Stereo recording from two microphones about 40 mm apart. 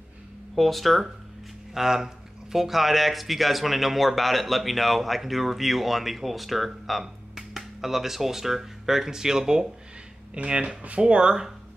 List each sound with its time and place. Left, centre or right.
0.6 s speech: centre
10.3 s speech: right